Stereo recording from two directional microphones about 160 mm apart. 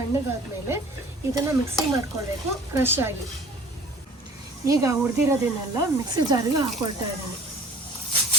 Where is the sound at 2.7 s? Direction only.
15° right (ahead or behind).